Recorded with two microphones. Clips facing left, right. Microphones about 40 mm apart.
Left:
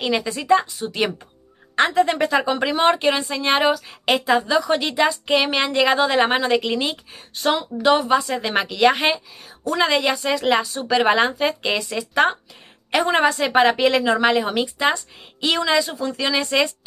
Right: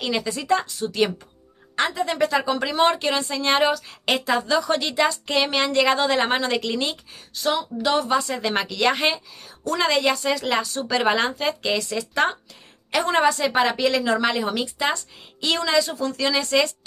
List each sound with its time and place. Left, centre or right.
0.0 s a woman's voice: centre
7.4 s speech: left
7.8 s a woman's voice: left